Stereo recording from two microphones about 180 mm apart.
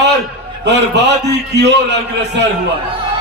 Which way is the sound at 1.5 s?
75° right (ahead or behind).